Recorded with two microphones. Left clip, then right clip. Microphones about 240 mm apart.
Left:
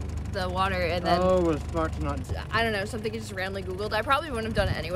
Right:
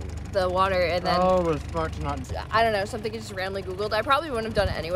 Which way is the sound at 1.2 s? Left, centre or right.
Right.